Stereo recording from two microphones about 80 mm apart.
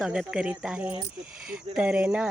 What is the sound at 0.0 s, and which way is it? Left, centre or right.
Speech, centre.